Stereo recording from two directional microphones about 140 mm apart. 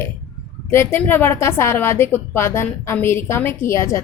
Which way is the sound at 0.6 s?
15° left (ahead or behind).